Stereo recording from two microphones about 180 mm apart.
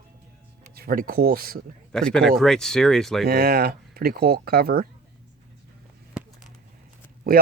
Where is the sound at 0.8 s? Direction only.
55° right (ahead or behind).